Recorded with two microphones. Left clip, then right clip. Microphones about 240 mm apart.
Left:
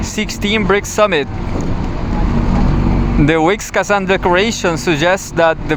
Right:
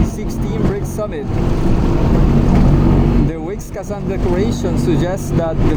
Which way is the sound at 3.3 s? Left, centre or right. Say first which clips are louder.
Left 12 dB; left.